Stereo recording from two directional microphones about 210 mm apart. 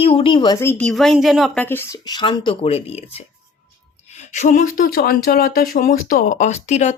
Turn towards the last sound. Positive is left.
turn(degrees=35)  # may be behind; listen again after turning